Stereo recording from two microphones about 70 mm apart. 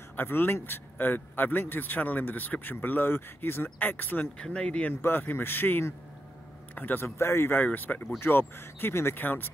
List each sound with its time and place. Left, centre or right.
0.1 s a man's voice: left
4.4 s speech: centre
5.0 s a man's voice: left